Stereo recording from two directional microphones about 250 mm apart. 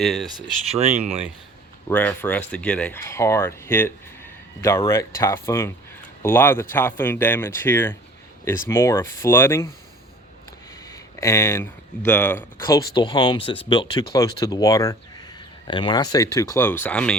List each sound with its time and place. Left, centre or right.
0.0 s speech: centre
0.8 s speech: right
1.9 s speech: centre
10.9 s speech: centre